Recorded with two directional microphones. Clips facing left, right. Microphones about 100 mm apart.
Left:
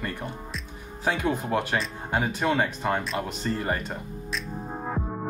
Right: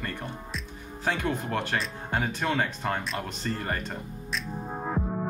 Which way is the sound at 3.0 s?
Centre (ahead or behind).